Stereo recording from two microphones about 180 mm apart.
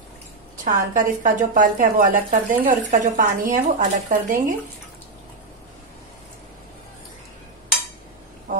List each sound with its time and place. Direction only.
0.7 s a woman's voice: 45° right (ahead or behind)